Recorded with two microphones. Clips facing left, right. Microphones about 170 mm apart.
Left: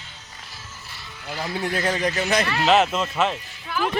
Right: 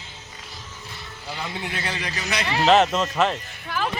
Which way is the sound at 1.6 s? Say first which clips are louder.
Left 11 dB; 45° left (ahead or behind).